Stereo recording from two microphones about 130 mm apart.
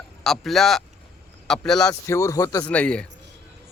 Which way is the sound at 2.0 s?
25° left (ahead or behind).